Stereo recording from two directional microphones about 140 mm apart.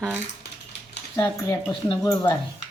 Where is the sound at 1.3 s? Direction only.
20° left (ahead or behind).